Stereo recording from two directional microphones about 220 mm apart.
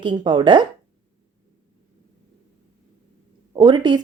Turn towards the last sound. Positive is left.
turn(degrees=-20)  # may be behind; listen again after turning